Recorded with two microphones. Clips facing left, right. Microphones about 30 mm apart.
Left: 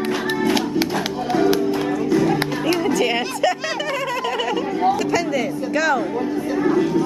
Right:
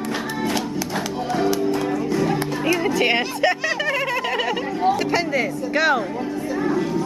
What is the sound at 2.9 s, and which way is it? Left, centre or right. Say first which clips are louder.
Speech: even; right.